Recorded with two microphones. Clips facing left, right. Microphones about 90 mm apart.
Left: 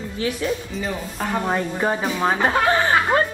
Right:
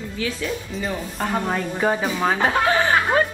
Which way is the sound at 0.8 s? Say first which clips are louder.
Even; centre (ahead or behind).